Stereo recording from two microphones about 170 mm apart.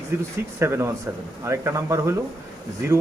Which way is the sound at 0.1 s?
15° right (ahead or behind).